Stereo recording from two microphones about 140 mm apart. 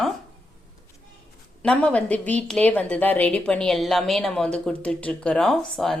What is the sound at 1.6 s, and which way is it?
Speech, 5° left (ahead or behind).